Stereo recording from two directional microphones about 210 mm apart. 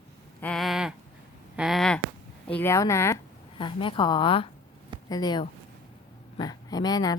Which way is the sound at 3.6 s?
25° left (ahead or behind).